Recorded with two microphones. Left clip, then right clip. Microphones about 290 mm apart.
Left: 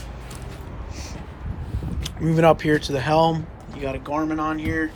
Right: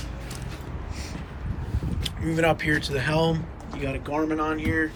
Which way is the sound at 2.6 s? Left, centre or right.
Left.